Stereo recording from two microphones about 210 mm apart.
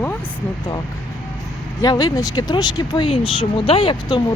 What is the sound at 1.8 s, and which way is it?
Speech, 20° left (ahead or behind).